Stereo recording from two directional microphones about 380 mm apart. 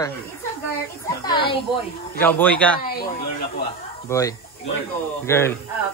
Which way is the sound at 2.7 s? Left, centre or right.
Left.